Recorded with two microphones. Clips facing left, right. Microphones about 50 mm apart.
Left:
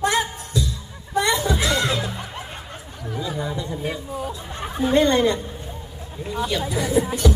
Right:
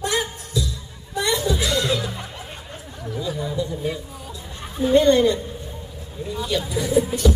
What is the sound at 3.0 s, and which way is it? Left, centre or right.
Speech, centre.